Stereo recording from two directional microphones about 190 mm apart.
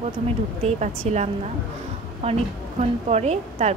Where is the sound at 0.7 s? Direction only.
35° right (ahead or behind).